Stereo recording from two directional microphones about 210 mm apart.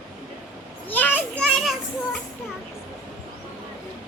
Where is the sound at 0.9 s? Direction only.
10° left (ahead or behind).